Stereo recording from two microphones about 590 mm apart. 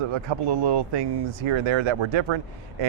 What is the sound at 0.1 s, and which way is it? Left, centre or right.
Speech, right.